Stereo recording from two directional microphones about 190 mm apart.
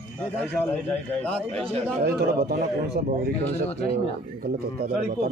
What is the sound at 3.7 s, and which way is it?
Speech, 35° left (ahead or behind).